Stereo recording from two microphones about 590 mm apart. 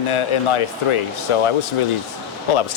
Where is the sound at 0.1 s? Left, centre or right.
Left.